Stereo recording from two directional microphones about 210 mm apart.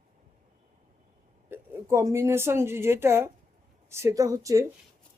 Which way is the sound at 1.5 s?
10° right (ahead or behind).